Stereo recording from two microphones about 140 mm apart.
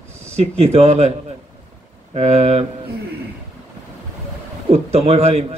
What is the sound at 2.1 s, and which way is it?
Speech, 50° right (ahead or behind).